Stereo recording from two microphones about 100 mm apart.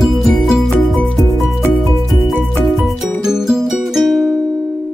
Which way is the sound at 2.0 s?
Centre (ahead or behind).